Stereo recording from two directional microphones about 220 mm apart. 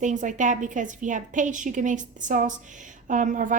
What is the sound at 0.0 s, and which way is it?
A woman's voice, 35° right (ahead or behind).